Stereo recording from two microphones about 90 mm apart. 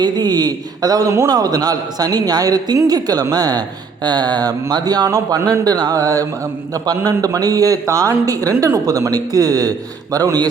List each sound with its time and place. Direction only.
0.0 s a man's voice: 50° right (ahead or behind)